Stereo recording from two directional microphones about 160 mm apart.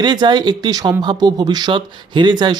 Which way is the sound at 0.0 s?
30° right (ahead or behind).